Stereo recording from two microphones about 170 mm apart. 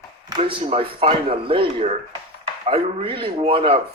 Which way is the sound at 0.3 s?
30° right (ahead or behind).